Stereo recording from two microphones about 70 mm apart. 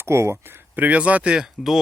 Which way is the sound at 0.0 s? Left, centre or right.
Right.